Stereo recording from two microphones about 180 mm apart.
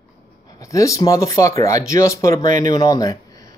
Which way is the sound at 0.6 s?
15° left (ahead or behind).